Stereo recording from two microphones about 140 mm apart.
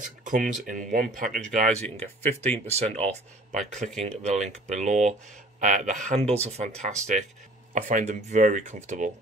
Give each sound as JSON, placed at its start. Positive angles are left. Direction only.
{"t": 0.2, "sound": "speech", "side_deg": -70}
{"t": 1.5, "sound": "speech", "side_deg": -55}
{"t": 6.1, "sound": "speech", "side_deg": -45}